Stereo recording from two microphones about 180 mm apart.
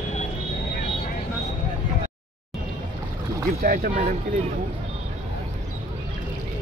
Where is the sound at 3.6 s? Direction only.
55° right (ahead or behind).